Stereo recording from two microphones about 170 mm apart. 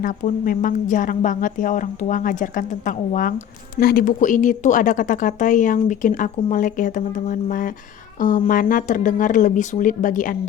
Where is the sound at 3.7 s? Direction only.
60° left (ahead or behind).